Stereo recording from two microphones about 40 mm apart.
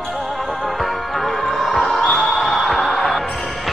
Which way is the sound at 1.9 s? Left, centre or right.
Centre.